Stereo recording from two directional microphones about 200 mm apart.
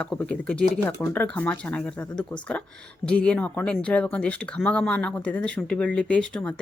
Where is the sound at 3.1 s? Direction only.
5° left (ahead or behind).